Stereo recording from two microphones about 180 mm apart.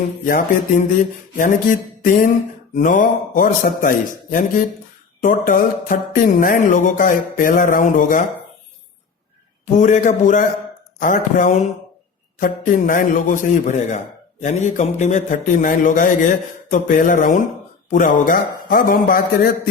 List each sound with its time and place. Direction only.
0.3 s music: 50° left (ahead or behind)
9.7 s music: 45° left (ahead or behind)